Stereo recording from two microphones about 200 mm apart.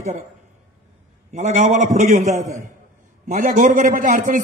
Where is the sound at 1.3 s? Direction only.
35° right (ahead or behind).